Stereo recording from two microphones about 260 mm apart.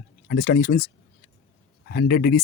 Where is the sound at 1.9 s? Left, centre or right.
Left.